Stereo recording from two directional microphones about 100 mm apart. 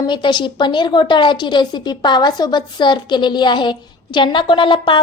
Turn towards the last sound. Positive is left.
turn(degrees=55)  # may be behind; listen again after turning